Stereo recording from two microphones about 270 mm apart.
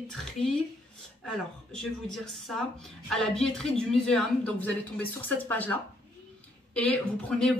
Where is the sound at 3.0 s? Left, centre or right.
Centre.